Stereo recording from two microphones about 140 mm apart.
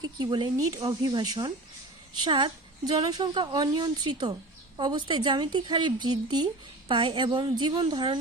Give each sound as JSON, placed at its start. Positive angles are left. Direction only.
{"t": 0.2, "sound": "a woman's voice", "side_deg": -35}